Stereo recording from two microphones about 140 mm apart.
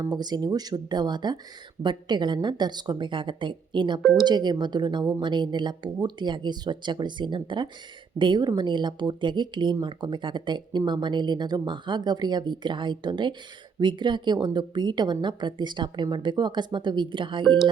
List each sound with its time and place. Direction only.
0.0 s a woman's voice: 30° right (ahead or behind)